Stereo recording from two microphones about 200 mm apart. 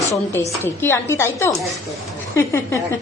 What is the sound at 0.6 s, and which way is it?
Speech, 10° left (ahead or behind).